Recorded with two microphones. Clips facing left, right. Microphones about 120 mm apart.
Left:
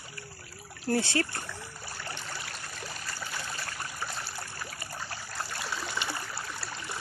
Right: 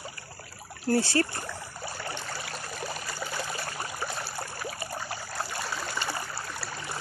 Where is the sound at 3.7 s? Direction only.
20° right (ahead or behind).